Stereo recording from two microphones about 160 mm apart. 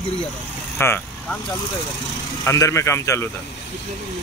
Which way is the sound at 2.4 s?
20° left (ahead or behind).